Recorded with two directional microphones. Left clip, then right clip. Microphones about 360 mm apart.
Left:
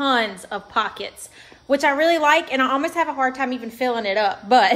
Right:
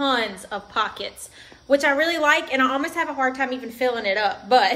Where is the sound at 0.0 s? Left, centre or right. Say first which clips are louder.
Left 2 dB; left.